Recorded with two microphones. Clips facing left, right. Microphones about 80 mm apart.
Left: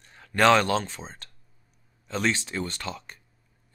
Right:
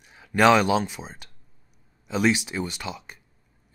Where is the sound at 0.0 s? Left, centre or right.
Centre.